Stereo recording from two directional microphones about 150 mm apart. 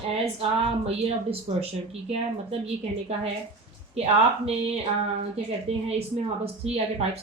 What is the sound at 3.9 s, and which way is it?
Speech, 45° right (ahead or behind).